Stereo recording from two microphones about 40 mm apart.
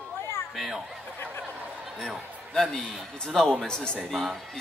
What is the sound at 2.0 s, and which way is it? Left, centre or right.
A man's voice, centre.